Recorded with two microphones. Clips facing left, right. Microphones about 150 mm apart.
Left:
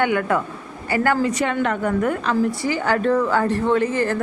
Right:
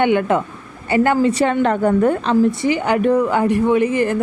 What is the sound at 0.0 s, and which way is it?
A woman's voice, 20° right (ahead or behind).